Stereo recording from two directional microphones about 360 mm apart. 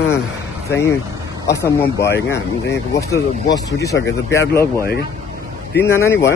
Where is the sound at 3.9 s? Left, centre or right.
Left.